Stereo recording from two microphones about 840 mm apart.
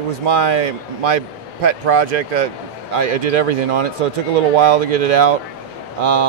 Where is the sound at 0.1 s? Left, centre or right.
Right.